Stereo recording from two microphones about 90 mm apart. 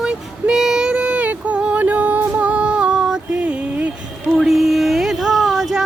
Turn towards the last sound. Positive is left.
turn(degrees=-5)  # may be behind; listen again after turning